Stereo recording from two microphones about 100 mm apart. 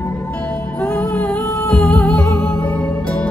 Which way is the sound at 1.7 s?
20° left (ahead or behind).